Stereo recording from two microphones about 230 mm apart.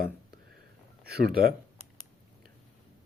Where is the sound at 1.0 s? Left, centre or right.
Right.